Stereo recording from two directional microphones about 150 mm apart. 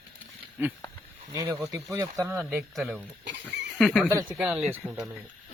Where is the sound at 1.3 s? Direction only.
20° right (ahead or behind).